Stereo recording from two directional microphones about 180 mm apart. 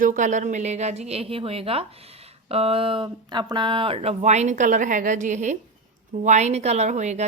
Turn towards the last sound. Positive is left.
turn(degrees=-40)  # may be behind; listen again after turning